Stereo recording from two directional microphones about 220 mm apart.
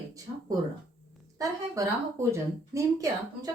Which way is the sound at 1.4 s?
15° right (ahead or behind).